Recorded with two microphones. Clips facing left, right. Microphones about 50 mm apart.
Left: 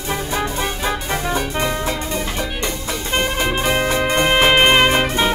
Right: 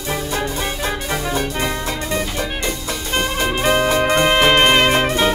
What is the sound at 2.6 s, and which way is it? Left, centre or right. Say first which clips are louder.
Music: even; centre.